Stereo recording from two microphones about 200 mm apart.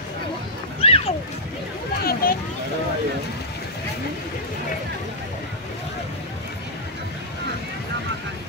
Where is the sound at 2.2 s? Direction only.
50° left (ahead or behind).